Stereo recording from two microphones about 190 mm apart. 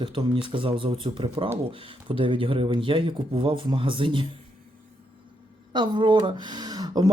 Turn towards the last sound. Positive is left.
turn(degrees=-20)  # may be behind; listen again after turning